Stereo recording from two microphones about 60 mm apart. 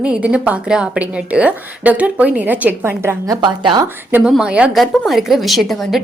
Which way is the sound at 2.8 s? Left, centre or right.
Right.